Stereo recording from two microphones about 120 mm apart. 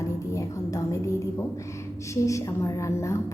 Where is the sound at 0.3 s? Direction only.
25° left (ahead or behind).